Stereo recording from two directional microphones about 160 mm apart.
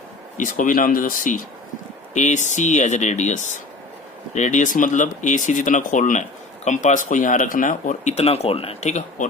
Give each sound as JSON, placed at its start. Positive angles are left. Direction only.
{"t": 0.3, "sound": "speech", "side_deg": 55}